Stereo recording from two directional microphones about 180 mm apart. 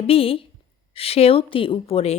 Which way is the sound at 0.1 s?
30° left (ahead or behind).